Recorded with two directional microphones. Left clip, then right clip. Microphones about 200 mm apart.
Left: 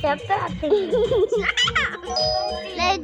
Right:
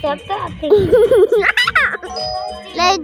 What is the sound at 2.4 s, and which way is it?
Music, 25° right (ahead or behind).